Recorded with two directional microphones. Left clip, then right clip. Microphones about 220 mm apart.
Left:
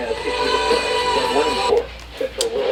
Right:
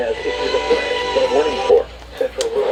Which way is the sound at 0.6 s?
35° left (ahead or behind).